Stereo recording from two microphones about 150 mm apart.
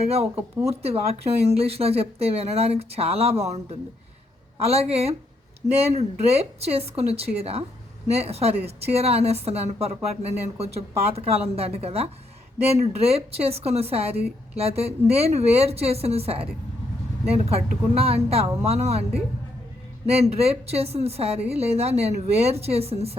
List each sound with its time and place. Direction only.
0.1 s a woman's voice: 45° right (ahead or behind)
20.4 s a woman's voice: 45° right (ahead or behind)